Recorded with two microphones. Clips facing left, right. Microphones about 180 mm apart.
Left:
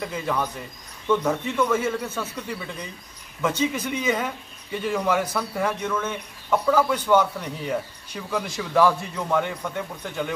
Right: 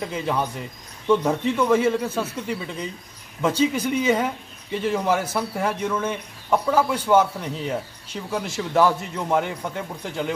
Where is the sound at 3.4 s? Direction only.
30° right (ahead or behind).